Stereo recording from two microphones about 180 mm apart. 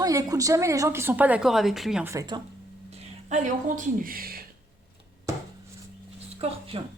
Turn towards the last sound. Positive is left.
turn(degrees=-30)  # may be behind; listen again after turning